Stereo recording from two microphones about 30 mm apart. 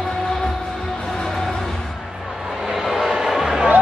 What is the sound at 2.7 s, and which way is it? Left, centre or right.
Train, centre.